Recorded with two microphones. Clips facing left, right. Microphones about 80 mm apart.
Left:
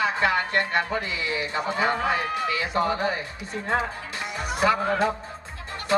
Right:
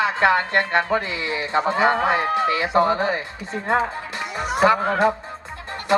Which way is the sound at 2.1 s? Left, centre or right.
Right.